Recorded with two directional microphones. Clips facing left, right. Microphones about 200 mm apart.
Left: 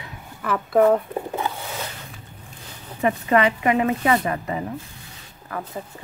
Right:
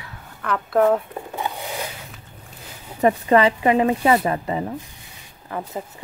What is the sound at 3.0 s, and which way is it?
Speech, 35° right (ahead or behind).